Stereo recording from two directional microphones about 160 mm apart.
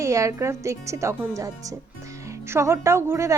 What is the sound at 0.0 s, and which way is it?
Speech, 20° right (ahead or behind).